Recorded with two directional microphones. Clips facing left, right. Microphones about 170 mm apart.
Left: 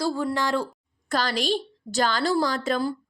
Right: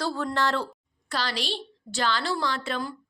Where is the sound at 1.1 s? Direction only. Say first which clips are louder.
Left 6 dB; 45° left (ahead or behind).